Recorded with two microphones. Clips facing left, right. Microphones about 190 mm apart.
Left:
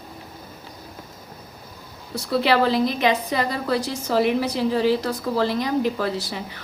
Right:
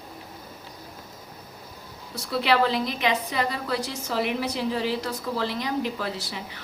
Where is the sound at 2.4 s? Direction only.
35° left (ahead or behind).